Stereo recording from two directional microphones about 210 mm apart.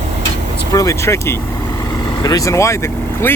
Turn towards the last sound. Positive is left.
turn(degrees=15)  # may be behind; listen again after turning